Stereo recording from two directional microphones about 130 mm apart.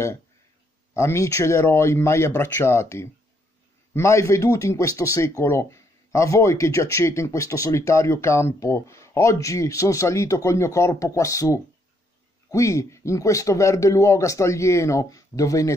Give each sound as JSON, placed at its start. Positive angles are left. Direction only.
{"t": 0.9, "sound": "speech", "side_deg": 20}